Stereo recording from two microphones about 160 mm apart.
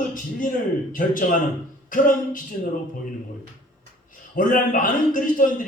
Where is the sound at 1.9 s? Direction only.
55° left (ahead or behind).